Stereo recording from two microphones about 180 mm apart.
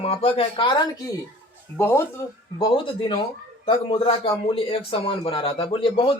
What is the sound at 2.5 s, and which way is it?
A man's voice, 25° left (ahead or behind).